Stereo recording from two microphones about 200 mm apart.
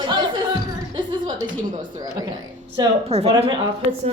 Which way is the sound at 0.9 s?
20° right (ahead or behind).